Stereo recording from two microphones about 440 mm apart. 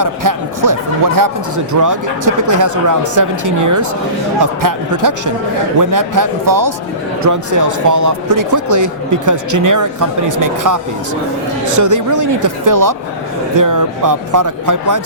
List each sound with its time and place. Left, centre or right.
0.0 s speech: right